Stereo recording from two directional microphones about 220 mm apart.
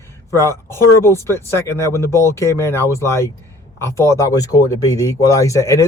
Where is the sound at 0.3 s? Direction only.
10° left (ahead or behind).